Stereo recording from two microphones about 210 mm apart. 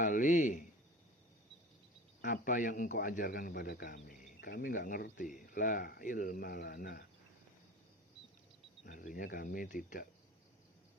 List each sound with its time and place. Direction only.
0.0 s speech: 40° left (ahead or behind)
2.2 s a man's voice: 40° left (ahead or behind)
8.9 s a man's voice: 40° left (ahead or behind)